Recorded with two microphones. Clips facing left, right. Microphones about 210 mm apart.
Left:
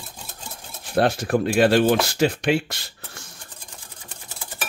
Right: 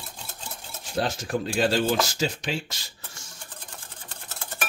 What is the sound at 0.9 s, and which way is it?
Speech, 60° left (ahead or behind).